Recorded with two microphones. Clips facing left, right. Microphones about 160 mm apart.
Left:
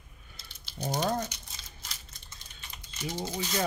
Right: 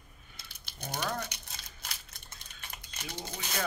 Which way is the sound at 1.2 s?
60° right (ahead or behind).